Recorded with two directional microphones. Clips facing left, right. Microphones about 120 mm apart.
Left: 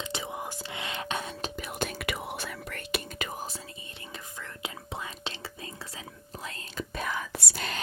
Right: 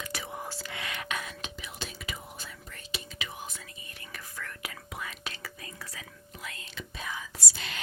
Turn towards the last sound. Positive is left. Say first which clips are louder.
# left 6 dB
turn(degrees=40)  # may be behind; listen again after turning